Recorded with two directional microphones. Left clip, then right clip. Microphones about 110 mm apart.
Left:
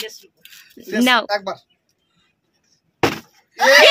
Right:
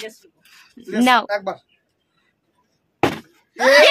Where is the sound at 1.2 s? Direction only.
40° right (ahead or behind).